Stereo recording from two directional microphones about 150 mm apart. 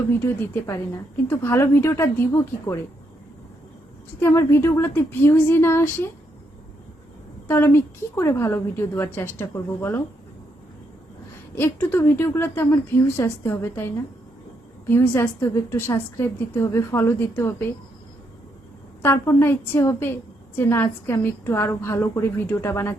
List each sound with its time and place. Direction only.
0.3 s a woman's voice: 15° left (ahead or behind)
4.2 s a woman's voice: 20° left (ahead or behind)
7.4 s a woman's voice: 15° left (ahead or behind)
11.5 s a woman's voice: 15° left (ahead or behind)
19.0 s a woman's voice: 20° left (ahead or behind)